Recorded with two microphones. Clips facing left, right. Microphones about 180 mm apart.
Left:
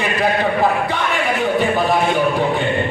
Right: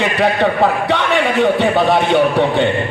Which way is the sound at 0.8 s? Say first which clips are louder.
Right 4 dB; 70° right (ahead or behind).